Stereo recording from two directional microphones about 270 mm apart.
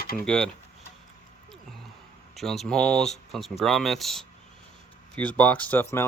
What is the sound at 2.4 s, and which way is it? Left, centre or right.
Speech, centre.